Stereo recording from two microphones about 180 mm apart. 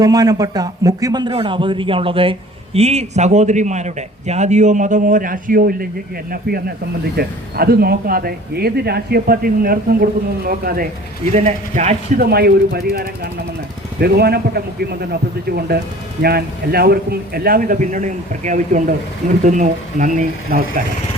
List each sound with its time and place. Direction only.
0.0 s a man's voice: 20° right (ahead or behind); by 5.9 s 55° right (ahead or behind)
7.2 s speech: 60° right (ahead or behind)
11.3 s a man's voice: 40° right (ahead or behind)
12.2 s speech: 60° right (ahead or behind)